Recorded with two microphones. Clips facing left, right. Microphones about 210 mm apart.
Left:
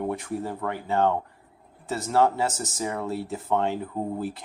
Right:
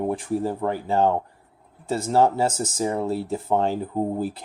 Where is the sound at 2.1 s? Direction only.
30° right (ahead or behind).